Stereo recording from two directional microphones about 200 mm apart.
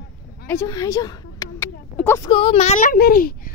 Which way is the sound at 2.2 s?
30° left (ahead or behind).